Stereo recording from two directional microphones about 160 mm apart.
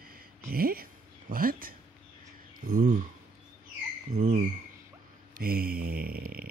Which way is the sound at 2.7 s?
55° right (ahead or behind).